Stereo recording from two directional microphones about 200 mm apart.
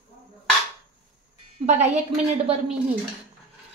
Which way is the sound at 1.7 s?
35° right (ahead or behind).